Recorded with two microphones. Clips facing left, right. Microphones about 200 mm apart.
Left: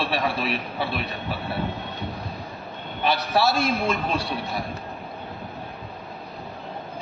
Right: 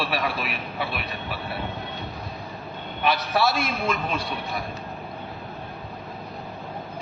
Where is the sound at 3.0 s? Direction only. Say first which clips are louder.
Left 1 dB; 30° left (ahead or behind).